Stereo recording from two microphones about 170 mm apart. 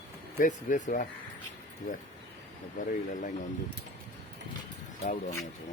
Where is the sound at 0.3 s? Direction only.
50° left (ahead or behind).